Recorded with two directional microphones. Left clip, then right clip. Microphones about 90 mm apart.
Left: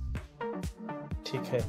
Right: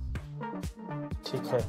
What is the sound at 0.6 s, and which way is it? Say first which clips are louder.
Music: right 1 dB; centre (ahead or behind).